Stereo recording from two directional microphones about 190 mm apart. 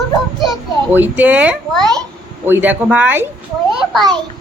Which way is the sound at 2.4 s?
10° right (ahead or behind).